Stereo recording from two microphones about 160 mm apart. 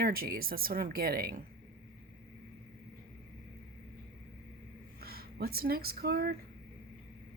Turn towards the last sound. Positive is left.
turn(degrees=-75)  # may be behind; listen again after turning